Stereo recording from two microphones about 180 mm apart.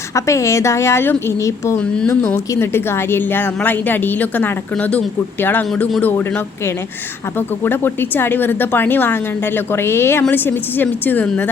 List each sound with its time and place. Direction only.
0.1 s speech: 15° left (ahead or behind)